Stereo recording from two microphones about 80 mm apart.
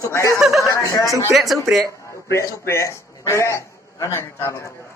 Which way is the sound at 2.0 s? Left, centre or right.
Left.